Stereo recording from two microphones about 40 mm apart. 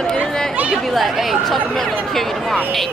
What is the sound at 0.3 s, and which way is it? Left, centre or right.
Chatter, centre.